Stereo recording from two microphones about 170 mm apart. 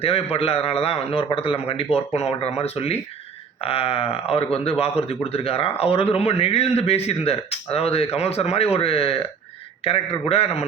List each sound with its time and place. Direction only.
0.0 s speech: 35° left (ahead or behind)